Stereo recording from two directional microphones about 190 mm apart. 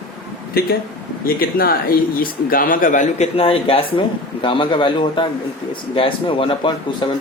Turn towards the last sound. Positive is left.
turn(degrees=25)  # may be behind; listen again after turning